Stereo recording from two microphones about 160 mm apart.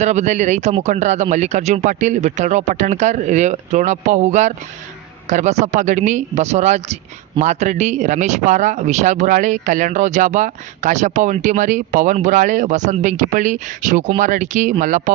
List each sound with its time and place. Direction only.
0.0 s speech: 45° right (ahead or behind)